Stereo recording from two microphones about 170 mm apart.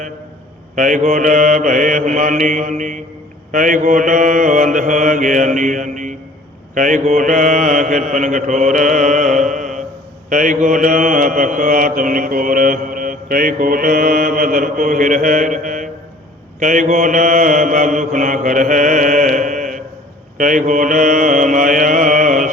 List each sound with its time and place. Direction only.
0.8 s mantra: 50° right (ahead or behind)